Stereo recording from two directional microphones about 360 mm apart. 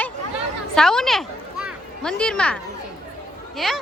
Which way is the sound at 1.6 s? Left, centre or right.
Centre.